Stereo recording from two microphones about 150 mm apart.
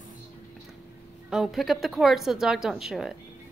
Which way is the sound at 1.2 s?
Centre (ahead or behind).